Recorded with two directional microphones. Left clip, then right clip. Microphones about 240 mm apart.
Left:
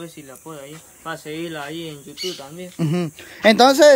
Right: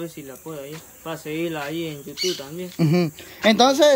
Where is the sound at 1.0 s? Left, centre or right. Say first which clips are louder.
Right 1 dB; centre.